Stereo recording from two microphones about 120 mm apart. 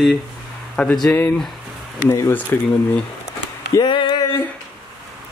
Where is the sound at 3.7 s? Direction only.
40° left (ahead or behind).